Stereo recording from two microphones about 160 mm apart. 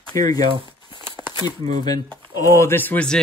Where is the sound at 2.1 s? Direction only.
15° left (ahead or behind).